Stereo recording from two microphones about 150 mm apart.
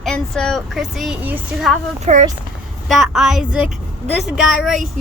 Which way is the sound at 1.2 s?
10° right (ahead or behind).